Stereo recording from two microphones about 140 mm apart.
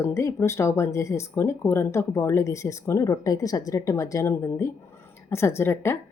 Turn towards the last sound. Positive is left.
turn(degrees=15)  # may be behind; listen again after turning